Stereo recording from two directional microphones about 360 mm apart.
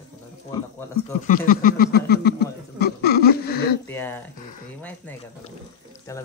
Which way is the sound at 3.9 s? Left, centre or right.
Centre.